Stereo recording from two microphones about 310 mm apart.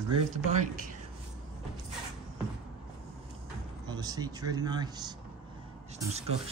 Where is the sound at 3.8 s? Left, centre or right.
Centre.